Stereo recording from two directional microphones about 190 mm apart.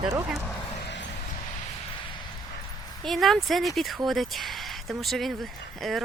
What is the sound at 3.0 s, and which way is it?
Speech, centre (ahead or behind).